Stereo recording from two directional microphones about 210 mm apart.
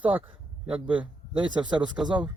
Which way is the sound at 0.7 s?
25° right (ahead or behind).